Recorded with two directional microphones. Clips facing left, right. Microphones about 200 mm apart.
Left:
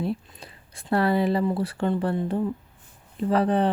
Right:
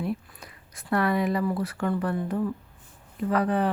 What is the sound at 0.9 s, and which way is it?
Speech, 30° left (ahead or behind).